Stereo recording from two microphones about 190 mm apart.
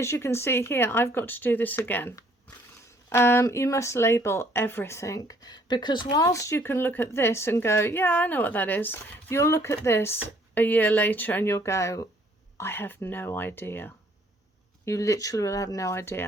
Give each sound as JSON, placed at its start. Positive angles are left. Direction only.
{"t": 0.0, "sound": "speech", "side_deg": 15}